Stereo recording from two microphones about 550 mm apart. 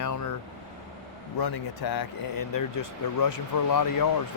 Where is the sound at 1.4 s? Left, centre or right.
Left.